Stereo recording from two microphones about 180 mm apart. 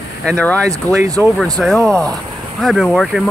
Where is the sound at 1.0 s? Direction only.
20° right (ahead or behind).